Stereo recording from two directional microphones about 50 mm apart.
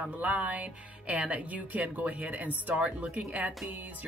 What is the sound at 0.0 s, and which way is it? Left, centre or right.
A woman's voice, right.